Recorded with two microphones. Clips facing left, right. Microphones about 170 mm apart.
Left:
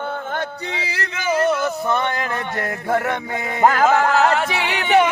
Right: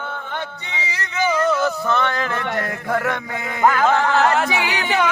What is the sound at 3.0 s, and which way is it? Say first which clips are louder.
Music: left 1 dB; 20° left (ahead or behind).